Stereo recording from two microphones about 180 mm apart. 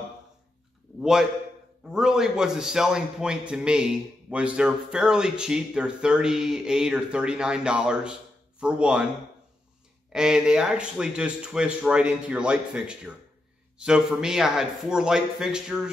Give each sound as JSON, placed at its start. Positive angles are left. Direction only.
{"t": 0.9, "sound": "a sound", "side_deg": 0}
{"t": 1.9, "sound": "a man's voice", "side_deg": -5}
{"t": 10.1, "sound": "a man's voice", "side_deg": -5}